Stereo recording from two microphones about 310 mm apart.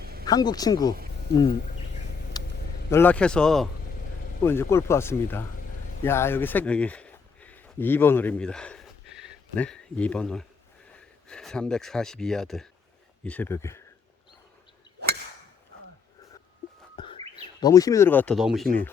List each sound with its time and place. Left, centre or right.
0.0 s a sound: right
0.3 s speech: centre
2.3 s vehicle: centre
2.9 s speech: centre
16.9 s bird: centre
17.6 s speech: centre